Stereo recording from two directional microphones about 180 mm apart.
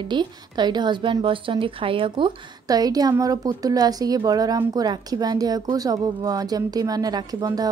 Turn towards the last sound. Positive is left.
turn(degrees=-20)  # may be behind; listen again after turning